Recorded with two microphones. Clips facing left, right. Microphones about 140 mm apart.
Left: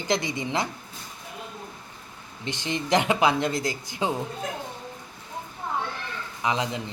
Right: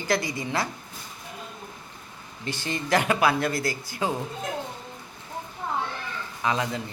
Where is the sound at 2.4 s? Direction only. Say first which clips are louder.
Left 1 dB; 20° left (ahead or behind).